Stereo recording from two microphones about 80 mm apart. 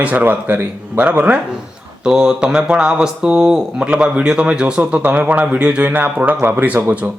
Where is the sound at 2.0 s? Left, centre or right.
Centre.